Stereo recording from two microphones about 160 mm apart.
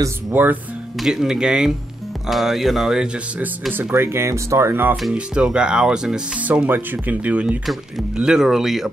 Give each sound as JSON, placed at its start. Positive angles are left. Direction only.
{"t": 0.0, "sound": "speech", "side_deg": -10}